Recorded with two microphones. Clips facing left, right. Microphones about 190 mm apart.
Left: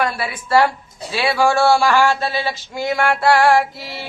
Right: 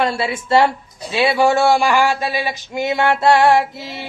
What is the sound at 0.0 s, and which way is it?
Speech, 25° right (ahead or behind).